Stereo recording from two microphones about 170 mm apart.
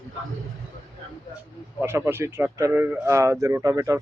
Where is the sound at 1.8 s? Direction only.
15° right (ahead or behind).